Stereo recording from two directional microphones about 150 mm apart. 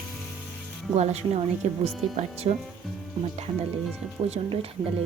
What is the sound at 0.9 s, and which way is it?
Speech, 45° right (ahead or behind).